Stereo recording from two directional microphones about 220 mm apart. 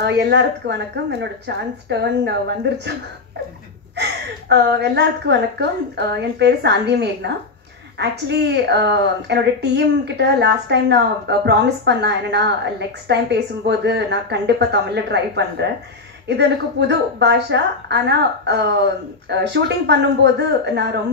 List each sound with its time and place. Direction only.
0.0 s a woman's voice: 50° right (ahead or behind)
3.9 s a woman's voice: 50° right (ahead or behind)